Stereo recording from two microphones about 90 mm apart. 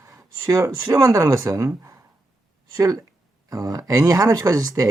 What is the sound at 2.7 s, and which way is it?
Speech, 40° right (ahead or behind).